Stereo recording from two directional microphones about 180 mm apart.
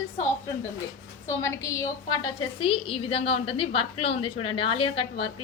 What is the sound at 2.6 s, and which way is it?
A woman's voice, 30° left (ahead or behind).